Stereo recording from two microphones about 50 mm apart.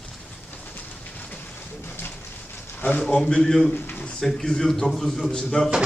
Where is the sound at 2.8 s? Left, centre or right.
Left.